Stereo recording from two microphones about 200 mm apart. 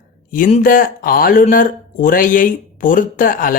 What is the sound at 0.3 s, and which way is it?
Speech, 40° left (ahead or behind).